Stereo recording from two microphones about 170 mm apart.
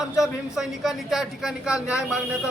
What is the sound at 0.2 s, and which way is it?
A man's voice, centre (ahead or behind).